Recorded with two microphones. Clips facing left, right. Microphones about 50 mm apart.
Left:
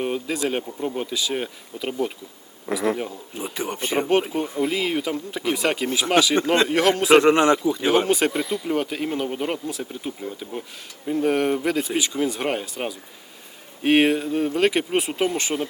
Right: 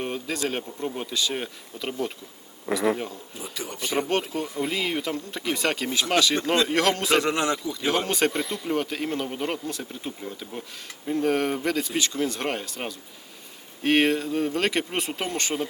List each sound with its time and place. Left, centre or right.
0.0 s speech: centre
2.6 s speech: centre
3.3 s speech: left
4.6 s speech: centre
7.1 s speech: left
7.9 s speech: centre